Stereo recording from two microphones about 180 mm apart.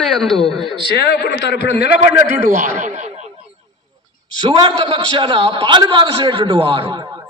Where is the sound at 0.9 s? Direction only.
65° left (ahead or behind).